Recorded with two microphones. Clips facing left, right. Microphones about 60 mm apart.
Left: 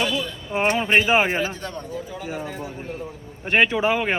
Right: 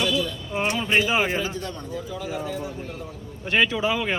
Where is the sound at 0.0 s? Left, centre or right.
Left.